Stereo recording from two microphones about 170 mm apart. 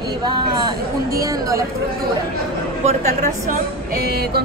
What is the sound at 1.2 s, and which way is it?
Speech, 20° right (ahead or behind).